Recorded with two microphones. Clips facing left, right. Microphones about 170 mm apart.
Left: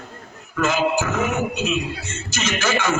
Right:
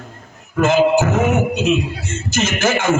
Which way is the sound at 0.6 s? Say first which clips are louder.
Right 7 dB; 55° right (ahead or behind).